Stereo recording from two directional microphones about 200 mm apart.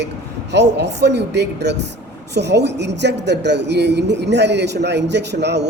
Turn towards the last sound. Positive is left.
turn(degrees=-60)  # may be behind; listen again after turning